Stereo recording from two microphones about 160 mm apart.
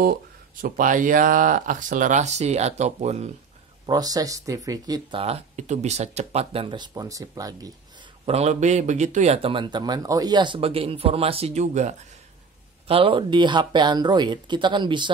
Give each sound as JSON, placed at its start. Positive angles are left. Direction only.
{"t": 0.0, "sound": "speech", "side_deg": -65}
{"t": 3.8, "sound": "speech", "side_deg": -25}
{"t": 5.2, "sound": "speech", "side_deg": -45}
{"t": 8.3, "sound": "speech", "side_deg": -45}
{"t": 12.8, "sound": "speech", "side_deg": -35}